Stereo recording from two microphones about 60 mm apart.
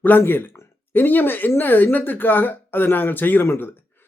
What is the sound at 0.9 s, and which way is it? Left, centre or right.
Speech, left.